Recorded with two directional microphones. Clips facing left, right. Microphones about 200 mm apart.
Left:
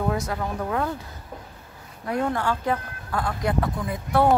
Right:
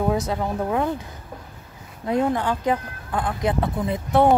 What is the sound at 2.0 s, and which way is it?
Speech, 20° right (ahead or behind).